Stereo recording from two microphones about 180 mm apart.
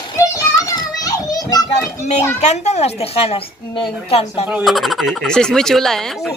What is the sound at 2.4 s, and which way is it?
A woman's voice, 40° left (ahead or behind).